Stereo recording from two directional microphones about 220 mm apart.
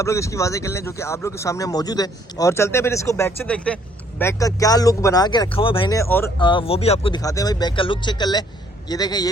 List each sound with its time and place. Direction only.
0.0 s speech: 15° left (ahead or behind)
6.4 s speech: 20° left (ahead or behind)